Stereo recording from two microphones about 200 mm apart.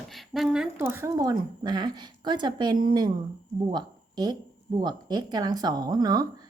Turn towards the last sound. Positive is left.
turn(degrees=-20)  # may be behind; listen again after turning